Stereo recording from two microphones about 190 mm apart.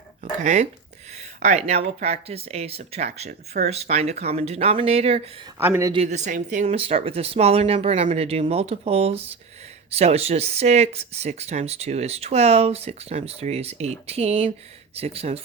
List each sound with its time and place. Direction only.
0.2 s speech: 40° right (ahead or behind)
5.5 s speech: 10° right (ahead or behind)
5.9 s speech: 35° right (ahead or behind)